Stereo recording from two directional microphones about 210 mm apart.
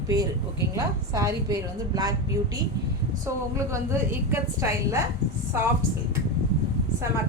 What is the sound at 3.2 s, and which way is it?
A woman's voice, 15° right (ahead or behind).